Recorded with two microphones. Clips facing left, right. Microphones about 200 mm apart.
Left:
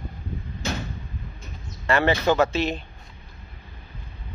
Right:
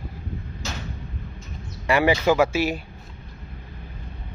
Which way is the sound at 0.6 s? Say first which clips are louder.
Left 6 dB; 60° left (ahead or behind).